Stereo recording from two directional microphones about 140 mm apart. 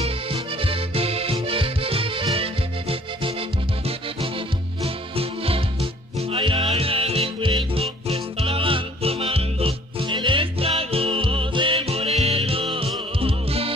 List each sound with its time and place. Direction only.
0.0 s music: 40° right (ahead or behind)